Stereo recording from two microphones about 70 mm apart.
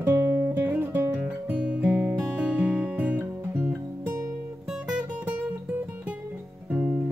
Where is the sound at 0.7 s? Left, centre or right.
Right.